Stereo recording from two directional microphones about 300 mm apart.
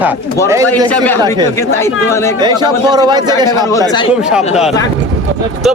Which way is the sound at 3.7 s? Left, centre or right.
Centre.